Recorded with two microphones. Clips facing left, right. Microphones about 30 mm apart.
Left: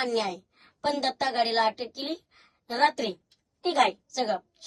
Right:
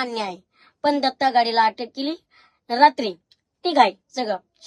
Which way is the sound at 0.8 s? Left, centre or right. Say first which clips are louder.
Right 8 dB; right.